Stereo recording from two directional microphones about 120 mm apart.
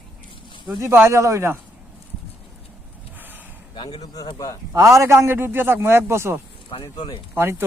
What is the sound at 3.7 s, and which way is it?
Speech, 40° left (ahead or behind).